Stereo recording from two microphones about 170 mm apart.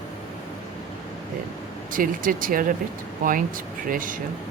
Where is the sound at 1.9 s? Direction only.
55° right (ahead or behind).